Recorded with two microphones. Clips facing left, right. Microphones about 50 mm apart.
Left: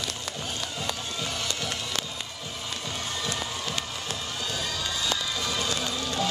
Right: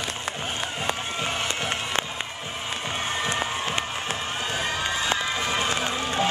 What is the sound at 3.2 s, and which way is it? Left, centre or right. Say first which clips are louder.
Crowd: right 5 dB; right.